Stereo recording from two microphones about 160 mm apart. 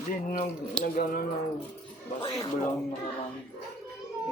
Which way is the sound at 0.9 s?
65° left (ahead or behind).